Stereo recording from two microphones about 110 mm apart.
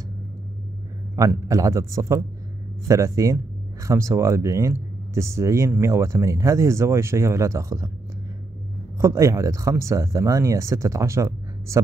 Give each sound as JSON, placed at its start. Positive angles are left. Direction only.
{"t": 1.2, "sound": "a man's voice", "side_deg": -30}
{"t": 8.9, "sound": "speech", "side_deg": -30}